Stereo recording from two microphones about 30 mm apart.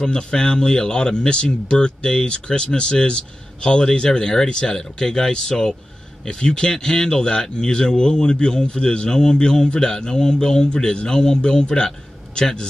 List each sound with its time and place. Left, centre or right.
0.0 s speech: left
11.1 s speech: left